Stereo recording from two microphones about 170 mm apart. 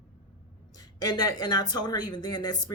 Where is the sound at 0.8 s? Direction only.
25° left (ahead or behind).